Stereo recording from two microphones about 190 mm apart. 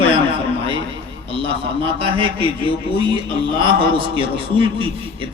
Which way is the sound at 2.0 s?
30° right (ahead or behind).